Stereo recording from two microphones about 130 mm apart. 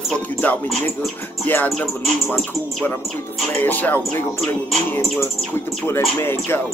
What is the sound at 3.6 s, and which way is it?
Speech, 15° left (ahead or behind).